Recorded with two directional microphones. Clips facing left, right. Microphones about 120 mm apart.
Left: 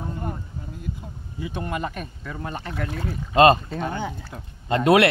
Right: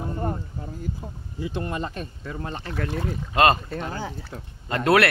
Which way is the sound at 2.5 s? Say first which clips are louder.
Even; 10° left (ahead or behind).